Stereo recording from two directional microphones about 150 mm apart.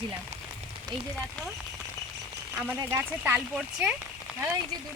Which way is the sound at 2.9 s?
15° right (ahead or behind).